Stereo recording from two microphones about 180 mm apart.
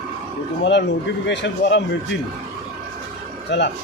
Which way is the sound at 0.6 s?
75° left (ahead or behind).